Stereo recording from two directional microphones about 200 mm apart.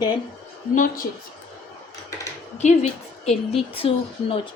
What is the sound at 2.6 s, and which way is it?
A woman's voice, 35° left (ahead or behind).